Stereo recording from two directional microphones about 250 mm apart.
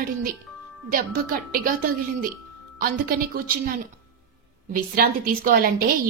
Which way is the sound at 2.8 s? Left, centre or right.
Right.